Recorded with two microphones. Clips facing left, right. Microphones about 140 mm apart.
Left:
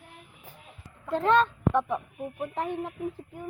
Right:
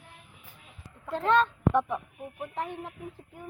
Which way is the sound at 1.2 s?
5° right (ahead or behind).